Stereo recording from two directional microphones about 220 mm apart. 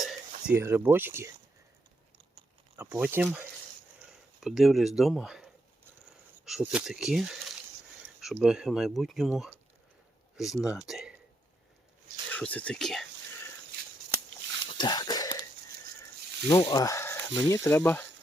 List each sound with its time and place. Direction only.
0.4 s speech: 10° right (ahead or behind)
2.7 s speech: 10° right (ahead or behind)
12.3 s speech: 5° left (ahead or behind)
14.7 s a sound: 20° left (ahead or behind)
16.5 s speech: 20° left (ahead or behind)